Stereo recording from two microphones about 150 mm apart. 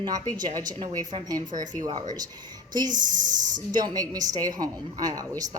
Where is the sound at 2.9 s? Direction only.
60° right (ahead or behind).